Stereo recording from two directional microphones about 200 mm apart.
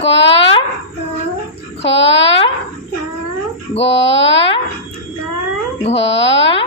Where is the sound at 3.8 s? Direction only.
65° left (ahead or behind).